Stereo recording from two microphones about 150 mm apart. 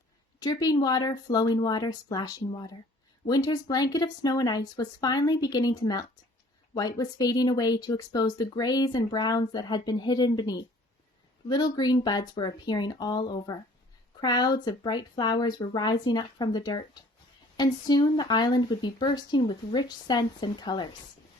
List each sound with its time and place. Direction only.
0.3 s speech: 25° left (ahead or behind)